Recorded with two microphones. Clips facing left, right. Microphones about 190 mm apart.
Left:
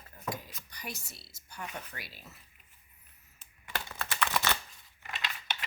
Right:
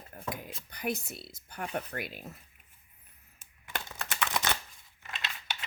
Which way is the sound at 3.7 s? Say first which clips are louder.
Left 1 dB; 15° right (ahead or behind).